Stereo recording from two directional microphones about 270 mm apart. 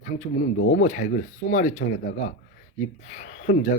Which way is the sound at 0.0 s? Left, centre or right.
Left.